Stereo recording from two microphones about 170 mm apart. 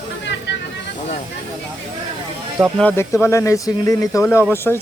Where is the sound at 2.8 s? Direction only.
10° left (ahead or behind).